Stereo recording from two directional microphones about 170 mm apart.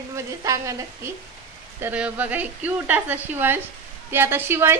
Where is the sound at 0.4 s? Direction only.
20° right (ahead or behind).